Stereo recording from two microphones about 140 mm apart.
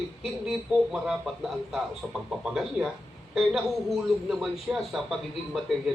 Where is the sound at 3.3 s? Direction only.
5° right (ahead or behind).